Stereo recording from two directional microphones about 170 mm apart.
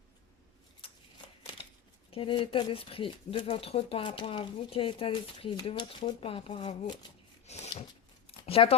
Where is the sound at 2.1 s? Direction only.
30° left (ahead or behind).